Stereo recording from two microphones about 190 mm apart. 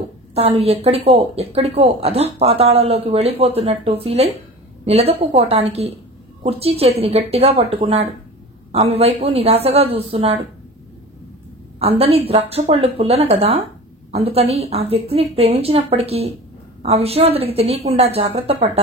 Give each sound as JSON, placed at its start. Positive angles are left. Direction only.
{"t": 0.3, "sound": "a woman's voice", "side_deg": -30}
{"t": 11.8, "sound": "a woman's voice", "side_deg": -30}